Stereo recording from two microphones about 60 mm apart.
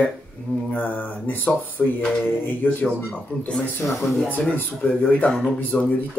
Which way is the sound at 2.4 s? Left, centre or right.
Left.